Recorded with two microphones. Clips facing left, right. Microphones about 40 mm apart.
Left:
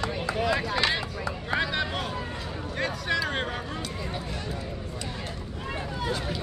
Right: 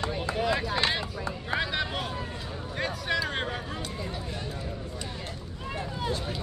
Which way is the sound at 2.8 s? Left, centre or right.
Centre.